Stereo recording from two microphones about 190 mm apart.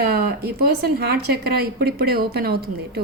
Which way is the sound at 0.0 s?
55° right (ahead or behind).